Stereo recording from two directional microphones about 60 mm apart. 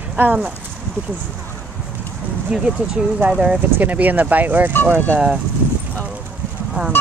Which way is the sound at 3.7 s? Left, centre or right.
Right.